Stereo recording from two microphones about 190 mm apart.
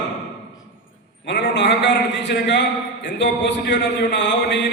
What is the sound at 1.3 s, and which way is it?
A man's voice, 65° left (ahead or behind).